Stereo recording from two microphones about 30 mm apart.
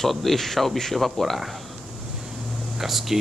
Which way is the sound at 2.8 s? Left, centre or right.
Centre.